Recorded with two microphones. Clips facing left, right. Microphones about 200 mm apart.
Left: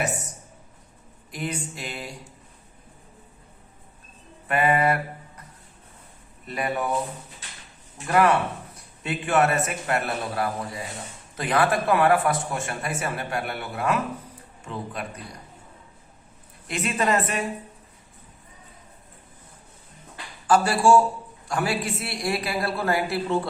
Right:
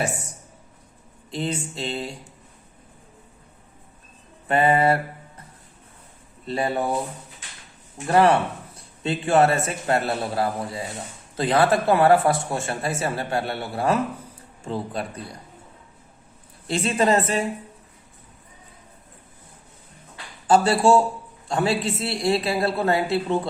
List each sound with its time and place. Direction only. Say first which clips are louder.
1.3 s a man's voice: right 4 dB; 25° right (ahead or behind)
4.4 s a man's voice: right 3 dB; 30° right (ahead or behind)
6.4 s a man's voice: right 3 dB; 30° right (ahead or behind)
8.0 s a man's voice: right 3 dB; 30° right (ahead or behind)
16.6 s a man's voice: right 4 dB; 30° right (ahead or behind)
20.5 s a man's voice: right 1 dB; 25° right (ahead or behind)